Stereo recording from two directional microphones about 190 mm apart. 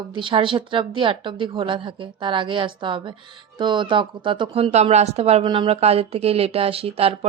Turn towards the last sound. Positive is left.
turn(degrees=-30)  # may be behind; listen again after turning